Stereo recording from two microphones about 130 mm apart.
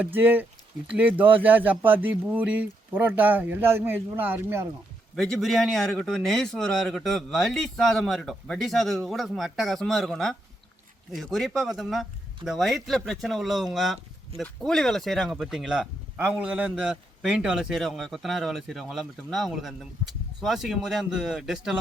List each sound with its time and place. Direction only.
0.0 s speech: 15° right (ahead or behind)
5.1 s speech: 5° left (ahead or behind)